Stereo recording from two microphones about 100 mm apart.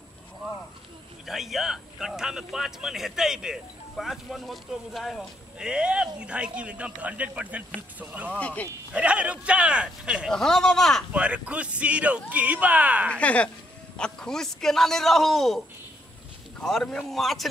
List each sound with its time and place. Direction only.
1.2 s speech: centre (ahead or behind)
8.3 s speech: 15° left (ahead or behind)
8.9 s speech: 10° right (ahead or behind)
10.3 s speech: 5° left (ahead or behind)
11.1 s speech: 10° right (ahead or behind)
13.1 s speech: 15° left (ahead or behind)